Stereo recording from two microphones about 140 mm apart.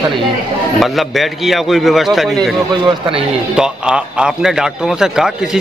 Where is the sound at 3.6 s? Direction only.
5° right (ahead or behind).